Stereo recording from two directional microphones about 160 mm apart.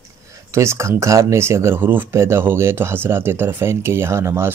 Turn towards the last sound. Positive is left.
turn(degrees=-15)  # may be behind; listen again after turning